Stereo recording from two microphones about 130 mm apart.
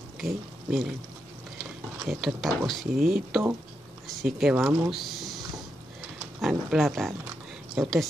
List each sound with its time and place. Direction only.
0.2 s speech: centre (ahead or behind)
2.0 s speech: centre (ahead or behind)
4.6 s speech: 20° right (ahead or behind)
4.8 s a sound: centre (ahead or behind)
6.4 s speech: centre (ahead or behind)